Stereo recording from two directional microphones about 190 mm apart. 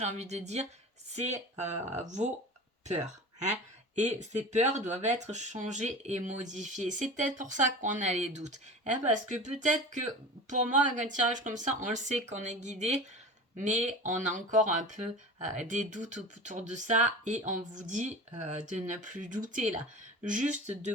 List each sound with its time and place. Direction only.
0.0 s speech: 35° right (ahead or behind)
3.4 s speech: 35° right (ahead or behind)